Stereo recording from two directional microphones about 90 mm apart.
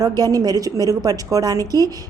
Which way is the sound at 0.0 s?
45° right (ahead or behind).